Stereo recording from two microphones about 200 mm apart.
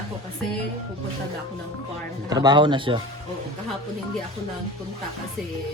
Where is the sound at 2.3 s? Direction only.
20° right (ahead or behind).